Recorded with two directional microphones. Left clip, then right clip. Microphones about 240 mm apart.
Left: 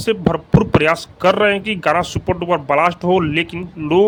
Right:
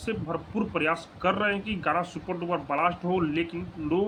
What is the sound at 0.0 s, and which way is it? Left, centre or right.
Speech, left.